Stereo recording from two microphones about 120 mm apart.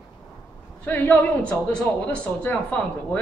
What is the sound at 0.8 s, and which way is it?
A man's voice, 15° left (ahead or behind).